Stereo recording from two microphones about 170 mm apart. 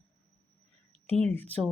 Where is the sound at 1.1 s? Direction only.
35° right (ahead or behind).